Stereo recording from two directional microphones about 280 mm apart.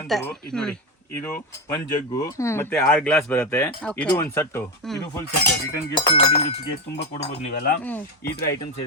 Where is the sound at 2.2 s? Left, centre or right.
Centre.